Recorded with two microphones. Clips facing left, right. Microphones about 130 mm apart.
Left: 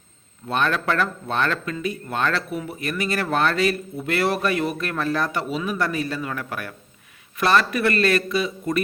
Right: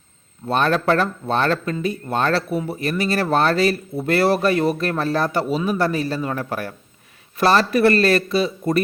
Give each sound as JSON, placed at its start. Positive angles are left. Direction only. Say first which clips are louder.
{"t": 0.4, "sound": "speech", "louder": "right 4 dB", "side_deg": -35}